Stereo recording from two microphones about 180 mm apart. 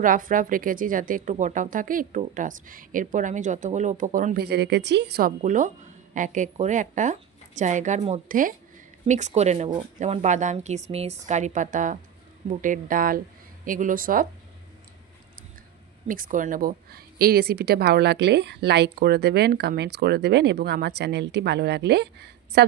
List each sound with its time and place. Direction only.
0.0 s a woman's voice: 50° right (ahead or behind); by 5.3 s 65° right (ahead or behind)
5.4 s a woman's voice: 45° right (ahead or behind)
16.1 s a woman's voice: 50° right (ahead or behind); by 22.7 s 65° right (ahead or behind)